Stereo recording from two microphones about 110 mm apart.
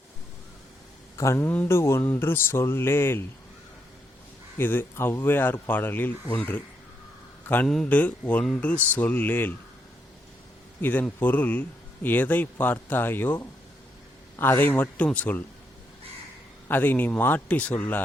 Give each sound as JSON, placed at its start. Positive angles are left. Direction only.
{"t": 1.1, "sound": "speech", "side_deg": 25}
{"t": 4.5, "sound": "a man's voice", "side_deg": 20}
{"t": 10.8, "sound": "a man's voice", "side_deg": 20}
{"t": 16.6, "sound": "speech", "side_deg": 20}